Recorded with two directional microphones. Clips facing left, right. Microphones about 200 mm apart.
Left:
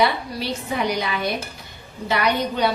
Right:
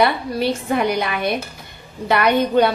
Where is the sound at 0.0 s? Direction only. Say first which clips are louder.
Right 4 dB; 55° right (ahead or behind).